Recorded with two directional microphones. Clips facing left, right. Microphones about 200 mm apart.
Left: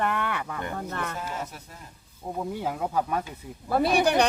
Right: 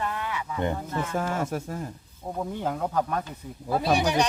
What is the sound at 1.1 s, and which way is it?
Speech, 50° right (ahead or behind).